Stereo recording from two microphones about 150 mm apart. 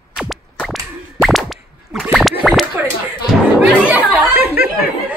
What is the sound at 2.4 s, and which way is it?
Speech, 5° right (ahead or behind).